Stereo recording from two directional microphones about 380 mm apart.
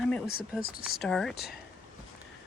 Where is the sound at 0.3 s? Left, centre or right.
Left.